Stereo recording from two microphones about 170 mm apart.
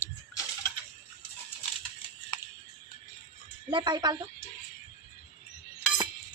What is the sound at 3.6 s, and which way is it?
Speech, 25° right (ahead or behind).